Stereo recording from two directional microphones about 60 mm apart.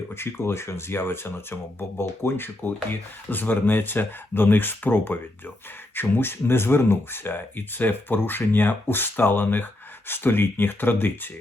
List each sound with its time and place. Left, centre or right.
0.1 s speech: left